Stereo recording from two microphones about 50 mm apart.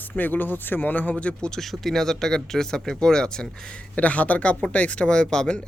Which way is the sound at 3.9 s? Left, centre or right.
Left.